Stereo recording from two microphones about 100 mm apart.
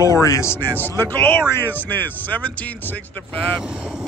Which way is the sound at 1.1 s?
20° left (ahead or behind).